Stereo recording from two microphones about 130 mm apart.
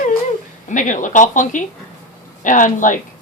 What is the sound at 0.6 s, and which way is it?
A woman's voice, 75° left (ahead or behind).